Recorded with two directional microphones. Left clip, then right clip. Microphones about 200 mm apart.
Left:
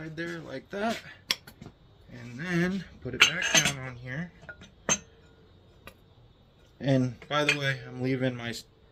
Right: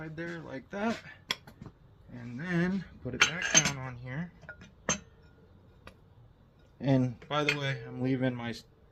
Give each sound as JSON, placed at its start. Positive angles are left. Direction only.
{"t": 0.0, "sound": "speech", "side_deg": 10}
{"t": 4.4, "sound": "chink", "side_deg": -20}
{"t": 6.7, "sound": "speech", "side_deg": 10}